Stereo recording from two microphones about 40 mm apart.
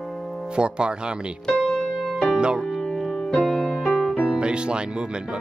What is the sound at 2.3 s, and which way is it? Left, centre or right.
Music, right.